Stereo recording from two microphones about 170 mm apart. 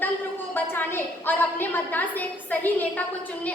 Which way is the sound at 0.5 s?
10° left (ahead or behind).